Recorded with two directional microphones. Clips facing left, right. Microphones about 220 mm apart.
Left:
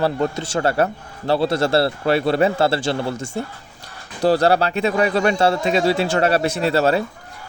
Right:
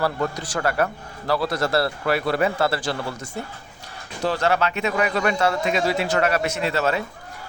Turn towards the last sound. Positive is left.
turn(degrees=35)  # may be behind; listen again after turning